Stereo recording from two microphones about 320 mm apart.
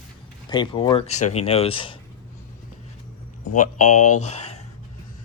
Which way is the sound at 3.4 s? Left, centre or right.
Left.